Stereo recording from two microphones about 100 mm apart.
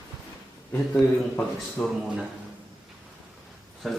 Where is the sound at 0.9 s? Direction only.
20° left (ahead or behind).